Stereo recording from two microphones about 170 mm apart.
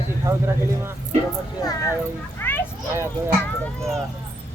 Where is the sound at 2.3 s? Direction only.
10° left (ahead or behind).